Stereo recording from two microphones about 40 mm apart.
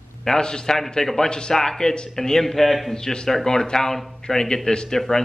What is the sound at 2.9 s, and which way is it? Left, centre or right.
Speech, centre.